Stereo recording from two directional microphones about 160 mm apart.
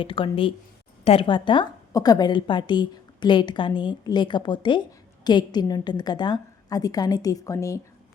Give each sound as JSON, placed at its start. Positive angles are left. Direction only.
{"t": 0.0, "sound": "a woman's voice", "side_deg": 35}